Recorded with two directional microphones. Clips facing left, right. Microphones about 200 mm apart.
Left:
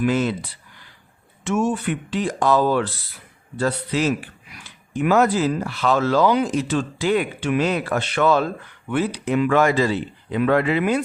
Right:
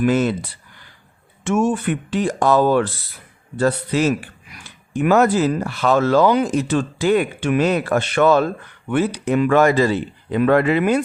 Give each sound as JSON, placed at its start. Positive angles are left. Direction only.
{"t": 0.0, "sound": "speech", "side_deg": -50}
{"t": 1.5, "sound": "speech", "side_deg": -50}